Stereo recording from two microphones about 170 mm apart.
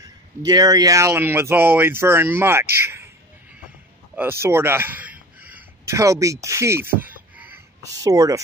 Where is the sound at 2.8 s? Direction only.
15° right (ahead or behind).